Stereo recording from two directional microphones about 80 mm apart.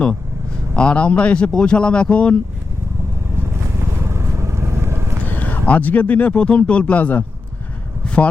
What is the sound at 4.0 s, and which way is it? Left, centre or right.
Vehicle, right.